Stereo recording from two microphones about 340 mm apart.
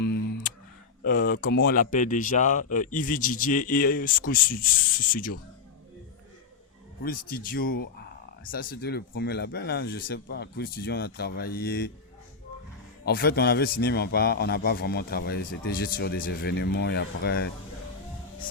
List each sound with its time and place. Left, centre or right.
1.0 s a man's voice: left
7.0 s a man's voice: left
13.1 s a man's voice: left